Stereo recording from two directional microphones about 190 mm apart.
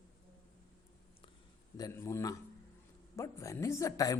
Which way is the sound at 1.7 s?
20° left (ahead or behind).